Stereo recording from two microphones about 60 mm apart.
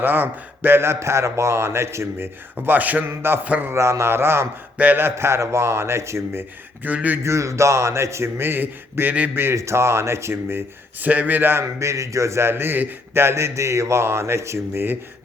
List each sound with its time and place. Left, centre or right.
0.0 s a man's voice: right
3.1 s a man's voice: right
3.4 s a man's voice: right
3.7 s a man's voice: right
4.8 s a man's voice: right
5.0 s a man's voice: right
6.8 s a man's voice: right
7.3 s a man's voice: right
8.4 s a man's voice: right
9.6 s a man's voice: right
11.0 s a man's voice: right
11.8 s a man's voice: right